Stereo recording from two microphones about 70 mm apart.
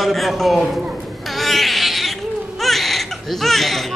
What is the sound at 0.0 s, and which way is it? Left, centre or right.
Speech, centre.